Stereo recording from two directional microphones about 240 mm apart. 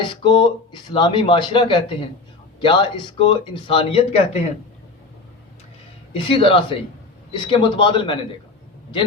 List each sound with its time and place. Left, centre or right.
0.1 s speech: centre
6.1 s speech: left